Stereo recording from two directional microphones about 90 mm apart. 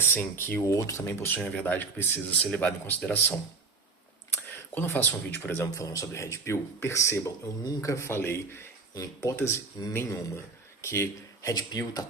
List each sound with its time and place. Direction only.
0.0 s speech: 25° left (ahead or behind)
5.7 s speech: 35° left (ahead or behind)
12.0 s speech: 40° left (ahead or behind)